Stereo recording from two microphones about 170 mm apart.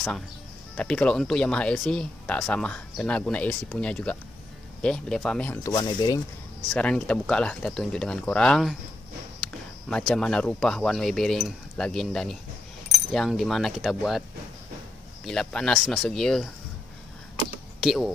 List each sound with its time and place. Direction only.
0.7 s speech: 5° left (ahead or behind)
5.7 s speech: 25° left (ahead or behind)
6.7 s speech: 5° left (ahead or behind)
9.8 s speech: 5° left (ahead or behind)
15.2 s speech: 5° left (ahead or behind)
17.7 s speech: centre (ahead or behind)